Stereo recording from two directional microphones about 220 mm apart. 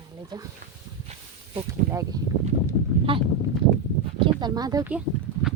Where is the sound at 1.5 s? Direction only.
15° right (ahead or behind).